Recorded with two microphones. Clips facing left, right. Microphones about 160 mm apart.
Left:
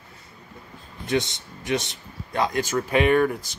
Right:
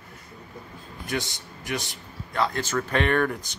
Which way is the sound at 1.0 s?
20° left (ahead or behind).